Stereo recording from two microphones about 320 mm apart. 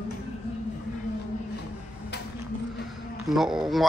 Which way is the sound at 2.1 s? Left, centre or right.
Left.